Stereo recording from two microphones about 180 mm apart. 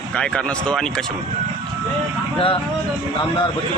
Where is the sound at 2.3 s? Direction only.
30° left (ahead or behind).